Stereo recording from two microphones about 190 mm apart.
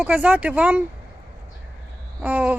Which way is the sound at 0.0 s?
5° right (ahead or behind).